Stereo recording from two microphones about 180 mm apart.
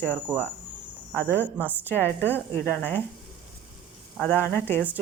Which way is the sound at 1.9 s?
10° left (ahead or behind).